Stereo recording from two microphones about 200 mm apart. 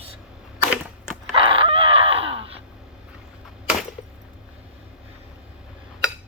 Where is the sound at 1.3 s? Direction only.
25° right (ahead or behind).